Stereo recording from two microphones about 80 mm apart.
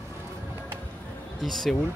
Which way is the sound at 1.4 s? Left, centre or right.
Centre.